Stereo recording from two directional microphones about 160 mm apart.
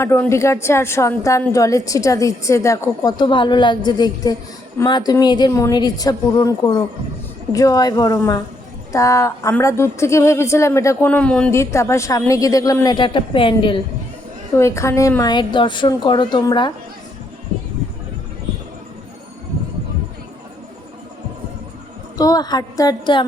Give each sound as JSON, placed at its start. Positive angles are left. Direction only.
{"t": 0.0, "sound": "a woman's voice", "side_deg": 15}
{"t": 11.5, "sound": "a woman's voice", "side_deg": 20}
{"t": 14.5, "sound": "a woman's voice", "side_deg": 20}
{"t": 22.2, "sound": "a woman's voice", "side_deg": 25}